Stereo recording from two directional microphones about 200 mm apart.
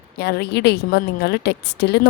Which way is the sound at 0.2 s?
55° left (ahead or behind).